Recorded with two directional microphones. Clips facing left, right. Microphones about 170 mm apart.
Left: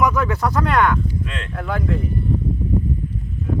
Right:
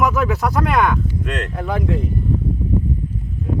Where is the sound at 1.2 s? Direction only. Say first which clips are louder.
Right 5 dB; 70° right (ahead or behind).